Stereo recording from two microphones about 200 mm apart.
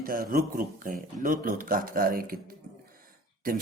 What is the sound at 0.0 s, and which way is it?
Speech, 45° right (ahead or behind).